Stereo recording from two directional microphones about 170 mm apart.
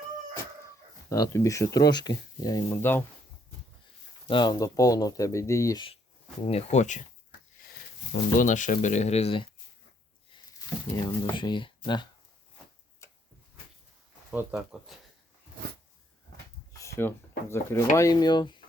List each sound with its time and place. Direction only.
1.1 s speech: 20° left (ahead or behind)
4.3 s speech: 25° left (ahead or behind)
6.4 s speech: 40° left (ahead or behind)
8.1 s speech: 50° left (ahead or behind)
10.9 s speech: 20° left (ahead or behind)
13.0 s a sound: 15° left (ahead or behind)
14.3 s speech: 5° right (ahead or behind)
16.7 s speech: 15° left (ahead or behind)